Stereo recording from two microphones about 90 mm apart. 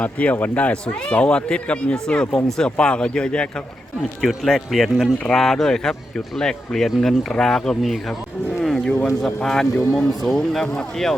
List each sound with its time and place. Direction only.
0.0 s speech: 15° left (ahead or behind)
8.6 s a sound: 5° left (ahead or behind)
9.2 s speech: 5° left (ahead or behind)